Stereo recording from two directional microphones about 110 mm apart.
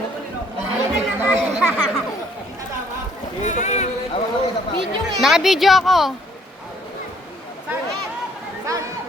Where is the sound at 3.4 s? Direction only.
90° left.